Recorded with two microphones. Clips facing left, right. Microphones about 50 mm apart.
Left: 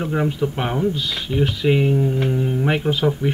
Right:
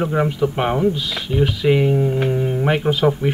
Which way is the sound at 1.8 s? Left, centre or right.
Right.